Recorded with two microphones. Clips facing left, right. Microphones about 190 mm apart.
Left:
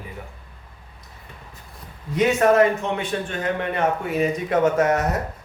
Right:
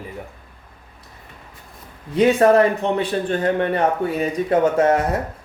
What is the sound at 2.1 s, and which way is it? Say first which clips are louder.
A man's voice: right 4 dB; 35° right (ahead or behind).